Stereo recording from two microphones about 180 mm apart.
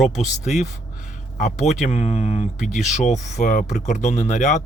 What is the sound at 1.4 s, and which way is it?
Speech, 40° left (ahead or behind).